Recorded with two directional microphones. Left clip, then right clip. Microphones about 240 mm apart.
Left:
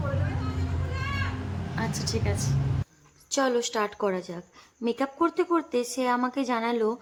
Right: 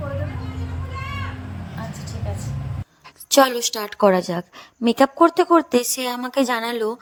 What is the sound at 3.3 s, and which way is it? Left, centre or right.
A woman's voice, right.